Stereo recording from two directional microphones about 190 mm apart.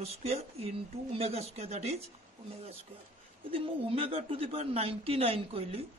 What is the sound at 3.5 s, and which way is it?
Speech, 30° right (ahead or behind).